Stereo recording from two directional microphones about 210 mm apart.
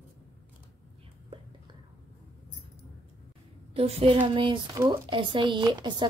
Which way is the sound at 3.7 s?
25° right (ahead or behind).